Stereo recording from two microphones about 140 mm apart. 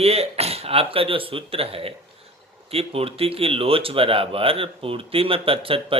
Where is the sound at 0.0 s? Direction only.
45° right (ahead or behind).